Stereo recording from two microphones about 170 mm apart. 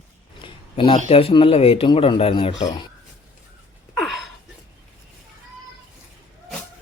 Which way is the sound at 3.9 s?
Centre (ahead or behind).